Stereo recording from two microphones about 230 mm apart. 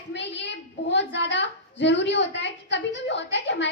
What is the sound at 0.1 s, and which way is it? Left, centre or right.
A child's voice, left.